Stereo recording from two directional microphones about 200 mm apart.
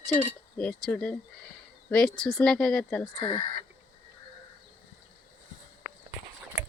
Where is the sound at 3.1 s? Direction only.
25° left (ahead or behind).